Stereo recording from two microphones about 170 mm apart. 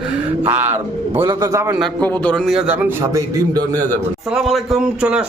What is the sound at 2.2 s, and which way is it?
A man's voice, 5° left (ahead or behind).